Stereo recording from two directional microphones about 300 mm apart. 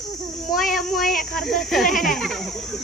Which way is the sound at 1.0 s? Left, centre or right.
Left.